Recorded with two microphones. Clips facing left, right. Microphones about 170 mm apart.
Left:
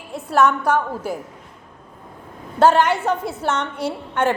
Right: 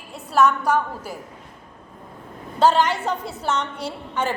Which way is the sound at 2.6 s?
55° left (ahead or behind).